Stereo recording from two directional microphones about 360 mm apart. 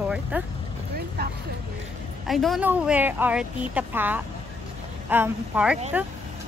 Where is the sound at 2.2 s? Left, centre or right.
Centre.